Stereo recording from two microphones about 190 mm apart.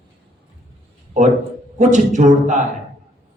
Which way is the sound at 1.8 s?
40° right (ahead or behind).